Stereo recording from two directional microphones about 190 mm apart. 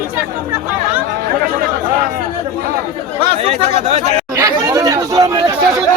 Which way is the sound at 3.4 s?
35° right (ahead or behind).